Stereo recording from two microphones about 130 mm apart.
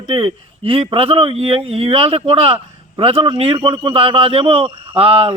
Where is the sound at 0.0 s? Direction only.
45° right (ahead or behind).